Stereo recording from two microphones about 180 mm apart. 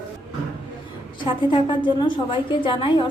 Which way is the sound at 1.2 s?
25° left (ahead or behind).